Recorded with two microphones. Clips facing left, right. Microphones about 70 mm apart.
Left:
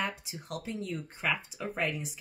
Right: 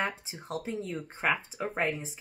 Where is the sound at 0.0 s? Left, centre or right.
Right.